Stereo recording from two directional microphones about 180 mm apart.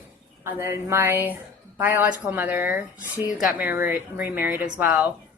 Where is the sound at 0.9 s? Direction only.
15° right (ahead or behind).